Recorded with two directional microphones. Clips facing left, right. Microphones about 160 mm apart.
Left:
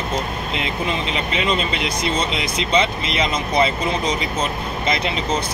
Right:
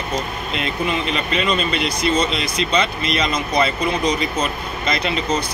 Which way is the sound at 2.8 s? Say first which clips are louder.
Left 1 dB; 25° left (ahead or behind).